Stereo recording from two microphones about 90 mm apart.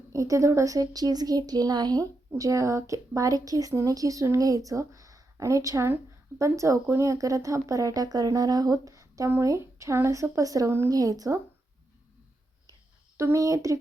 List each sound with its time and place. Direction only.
0.1 s a woman's voice: 40° right (ahead or behind)
13.1 s speech: 35° right (ahead or behind)